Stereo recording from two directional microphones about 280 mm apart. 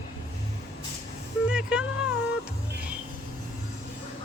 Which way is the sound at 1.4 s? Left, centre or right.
Centre.